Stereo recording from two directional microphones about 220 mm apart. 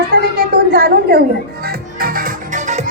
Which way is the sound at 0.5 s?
45° right (ahead or behind).